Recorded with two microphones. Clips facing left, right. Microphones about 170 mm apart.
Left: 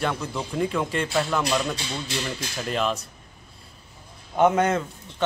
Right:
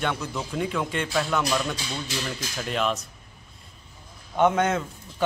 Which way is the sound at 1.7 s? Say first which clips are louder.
Left 1 dB; 25° left (ahead or behind).